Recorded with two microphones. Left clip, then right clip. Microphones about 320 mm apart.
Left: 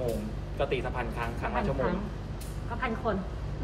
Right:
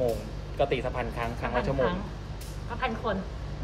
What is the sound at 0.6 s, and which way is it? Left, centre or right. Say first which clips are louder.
Speech: right 3 dB; right.